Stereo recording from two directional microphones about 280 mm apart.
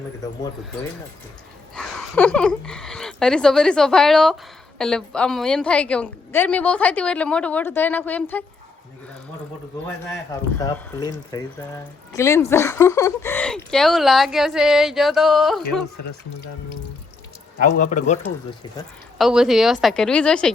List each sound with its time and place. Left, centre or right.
1.7 s a woman's voice: centre
10.6 s a woman's voice: centre
17.7 s a man's voice: left
19.2 s a woman's voice: centre